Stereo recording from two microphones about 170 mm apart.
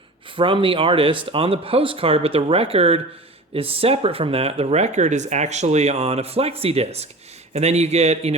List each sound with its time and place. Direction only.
0.3 s speech: 30° right (ahead or behind)